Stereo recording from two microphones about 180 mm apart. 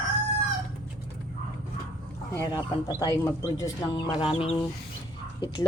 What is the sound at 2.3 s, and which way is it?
Speech, 20° left (ahead or behind).